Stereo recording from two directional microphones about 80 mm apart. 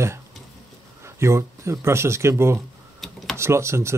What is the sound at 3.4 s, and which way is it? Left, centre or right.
Speech, right.